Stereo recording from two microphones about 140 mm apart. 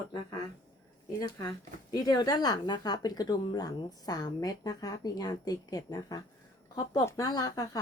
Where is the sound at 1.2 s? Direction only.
25° left (ahead or behind).